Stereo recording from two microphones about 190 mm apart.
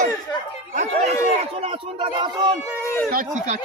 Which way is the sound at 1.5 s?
30° right (ahead or behind).